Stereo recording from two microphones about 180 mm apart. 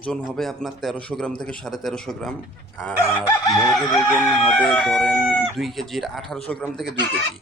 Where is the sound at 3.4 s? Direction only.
Centre (ahead or behind).